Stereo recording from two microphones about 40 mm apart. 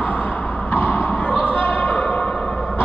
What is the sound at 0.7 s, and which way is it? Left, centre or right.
Basketball bounce, left.